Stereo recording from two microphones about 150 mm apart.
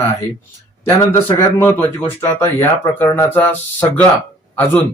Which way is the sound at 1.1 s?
15° left (ahead or behind).